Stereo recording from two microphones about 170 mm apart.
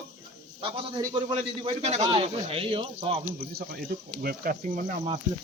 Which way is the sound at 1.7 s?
35° right (ahead or behind).